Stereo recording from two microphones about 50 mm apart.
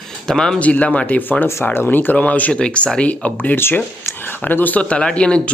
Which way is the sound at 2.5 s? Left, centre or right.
Centre.